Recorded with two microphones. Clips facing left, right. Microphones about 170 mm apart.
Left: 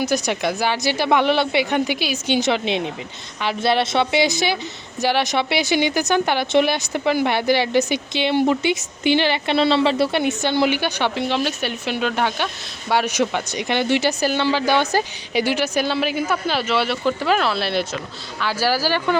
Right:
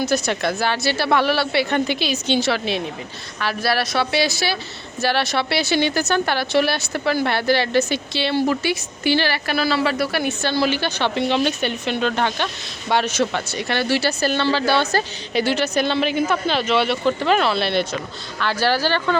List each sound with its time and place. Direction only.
0.0 s a woman's voice: 15° left (ahead or behind)
11.2 s speech: centre (ahead or behind)